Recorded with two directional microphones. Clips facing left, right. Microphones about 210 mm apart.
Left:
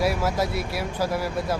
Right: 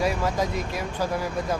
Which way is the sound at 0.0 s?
10° left (ahead or behind).